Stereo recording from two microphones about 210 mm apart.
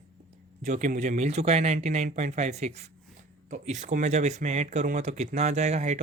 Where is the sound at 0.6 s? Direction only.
35° right (ahead or behind).